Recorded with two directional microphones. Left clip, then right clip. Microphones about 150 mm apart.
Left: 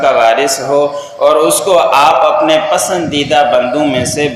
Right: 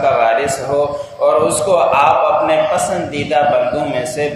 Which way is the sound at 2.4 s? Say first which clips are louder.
Left 3 dB; 30° left (ahead or behind).